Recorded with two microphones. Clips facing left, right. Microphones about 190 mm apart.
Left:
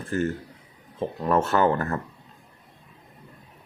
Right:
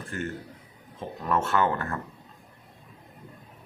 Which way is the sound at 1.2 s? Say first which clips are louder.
Left 4 dB; 40° left (ahead or behind).